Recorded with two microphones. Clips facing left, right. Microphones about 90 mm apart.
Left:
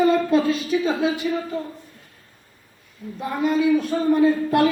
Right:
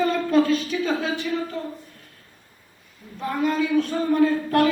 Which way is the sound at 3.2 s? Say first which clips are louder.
Left 2 dB; 10° left (ahead or behind).